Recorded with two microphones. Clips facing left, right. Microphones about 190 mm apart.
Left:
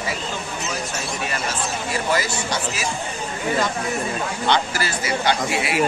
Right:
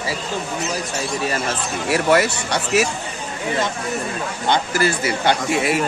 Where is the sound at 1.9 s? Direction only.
65° right (ahead or behind).